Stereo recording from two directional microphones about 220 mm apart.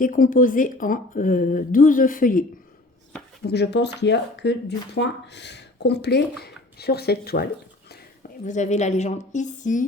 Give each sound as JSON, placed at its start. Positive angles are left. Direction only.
{"t": 0.0, "sound": "speech", "side_deg": 40}
{"t": 3.4, "sound": "speech", "side_deg": 50}
{"t": 8.4, "sound": "speech", "side_deg": 35}